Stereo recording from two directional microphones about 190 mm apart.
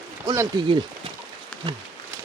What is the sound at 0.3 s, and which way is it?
Speech, 20° right (ahead or behind).